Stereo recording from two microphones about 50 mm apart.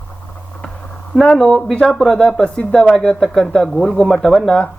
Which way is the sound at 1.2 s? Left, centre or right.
Centre.